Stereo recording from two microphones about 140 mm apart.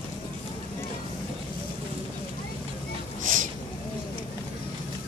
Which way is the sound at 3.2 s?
70° right (ahead or behind).